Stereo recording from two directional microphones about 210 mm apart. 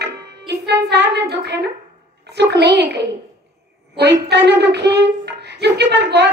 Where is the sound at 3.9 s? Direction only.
55° right (ahead or behind).